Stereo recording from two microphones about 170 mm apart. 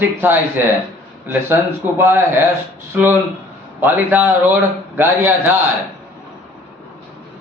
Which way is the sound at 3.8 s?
10° right (ahead or behind).